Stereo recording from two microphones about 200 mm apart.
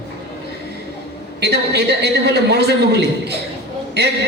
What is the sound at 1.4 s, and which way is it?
A woman's voice, 55° right (ahead or behind).